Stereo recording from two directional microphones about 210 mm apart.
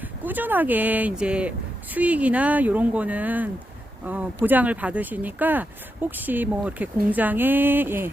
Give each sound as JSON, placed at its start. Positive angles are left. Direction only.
{"t": 0.3, "sound": "a woman's voice", "side_deg": -10}